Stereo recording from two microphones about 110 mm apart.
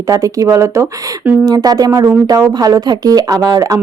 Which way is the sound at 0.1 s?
30° right (ahead or behind).